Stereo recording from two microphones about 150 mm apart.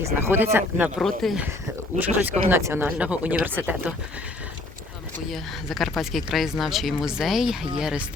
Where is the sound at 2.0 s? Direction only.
15° right (ahead or behind).